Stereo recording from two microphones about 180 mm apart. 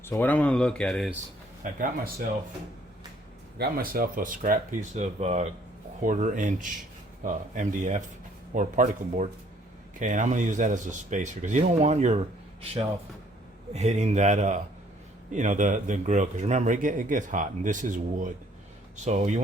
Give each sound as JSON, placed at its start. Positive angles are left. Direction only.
{"t": 0.0, "sound": "speech", "side_deg": 10}
{"t": 1.6, "sound": "a man's voice", "side_deg": -45}
{"t": 3.6, "sound": "a man's voice", "side_deg": -55}
{"t": 13.7, "sound": "a man's voice", "side_deg": -40}